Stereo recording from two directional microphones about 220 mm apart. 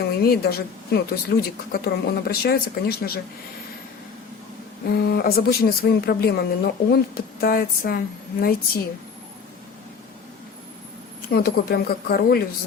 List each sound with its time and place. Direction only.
0.0 s a woman's voice: 45° left (ahead or behind)
4.9 s a woman's voice: 45° left (ahead or behind)
11.3 s a woman's voice: 45° left (ahead or behind)